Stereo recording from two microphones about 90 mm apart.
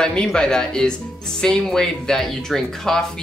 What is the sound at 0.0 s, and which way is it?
Speech, 10° left (ahead or behind).